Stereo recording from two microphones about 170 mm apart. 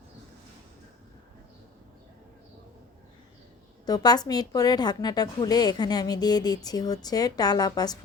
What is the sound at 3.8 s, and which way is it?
A woman's voice, 25° left (ahead or behind).